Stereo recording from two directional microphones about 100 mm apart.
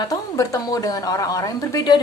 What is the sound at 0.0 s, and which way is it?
A woman's voice, 35° left (ahead or behind).